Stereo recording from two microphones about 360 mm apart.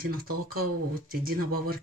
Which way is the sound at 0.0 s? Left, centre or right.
Right.